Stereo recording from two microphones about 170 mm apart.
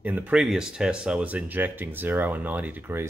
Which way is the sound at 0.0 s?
10° right (ahead or behind).